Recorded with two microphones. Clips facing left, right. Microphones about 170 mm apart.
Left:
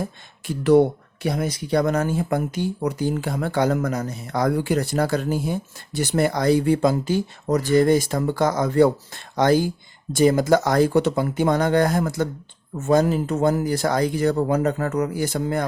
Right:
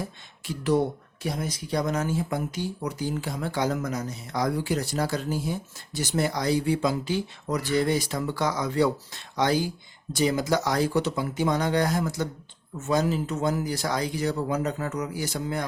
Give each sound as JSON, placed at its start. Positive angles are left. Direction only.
{"t": 0.0, "sound": "speech", "side_deg": 55}